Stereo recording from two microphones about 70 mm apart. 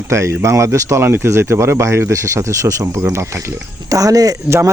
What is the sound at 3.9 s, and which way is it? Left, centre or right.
Speech, right.